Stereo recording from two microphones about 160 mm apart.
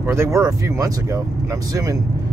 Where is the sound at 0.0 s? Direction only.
15° right (ahead or behind).